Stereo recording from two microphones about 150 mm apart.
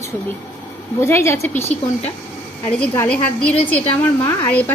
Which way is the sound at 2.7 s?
10° left (ahead or behind).